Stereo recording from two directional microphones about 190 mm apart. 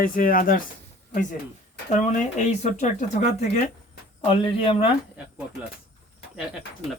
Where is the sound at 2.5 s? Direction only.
40° left (ahead or behind).